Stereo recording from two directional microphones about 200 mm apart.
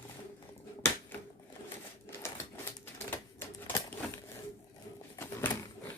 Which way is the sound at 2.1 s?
10° left (ahead or behind).